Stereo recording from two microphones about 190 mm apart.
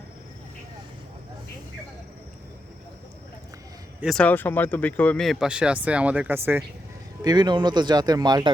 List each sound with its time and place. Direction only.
4.0 s speech: 5° left (ahead or behind); by 6.7 s 10° right (ahead or behind)
7.2 s speech: 20° right (ahead or behind)